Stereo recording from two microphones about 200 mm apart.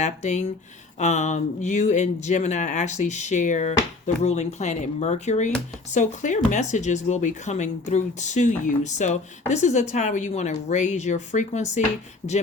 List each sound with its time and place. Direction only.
0.0 s speech: 35° left (ahead or behind)